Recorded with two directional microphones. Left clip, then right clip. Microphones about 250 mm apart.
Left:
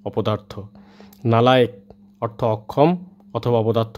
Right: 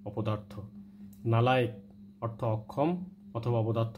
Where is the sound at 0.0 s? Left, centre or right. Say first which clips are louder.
Left 13 dB; left.